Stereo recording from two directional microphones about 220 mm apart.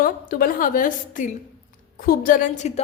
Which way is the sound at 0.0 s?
40° left (ahead or behind).